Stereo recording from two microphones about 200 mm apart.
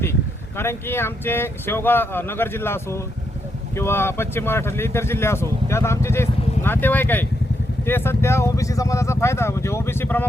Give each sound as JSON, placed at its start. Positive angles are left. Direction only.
{"t": 0.0, "sound": "speech", "side_deg": 10}